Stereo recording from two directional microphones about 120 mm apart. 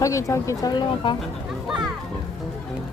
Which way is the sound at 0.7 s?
40° left (ahead or behind).